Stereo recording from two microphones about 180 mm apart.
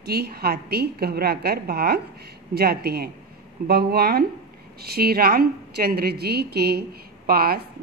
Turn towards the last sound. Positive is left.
turn(degrees=-55)  # may be behind; listen again after turning